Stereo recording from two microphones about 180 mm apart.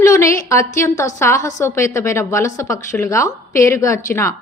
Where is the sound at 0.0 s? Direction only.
15° left (ahead or behind).